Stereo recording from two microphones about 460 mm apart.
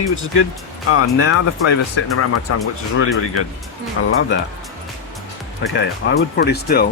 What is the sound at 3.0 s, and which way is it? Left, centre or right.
Speech, left.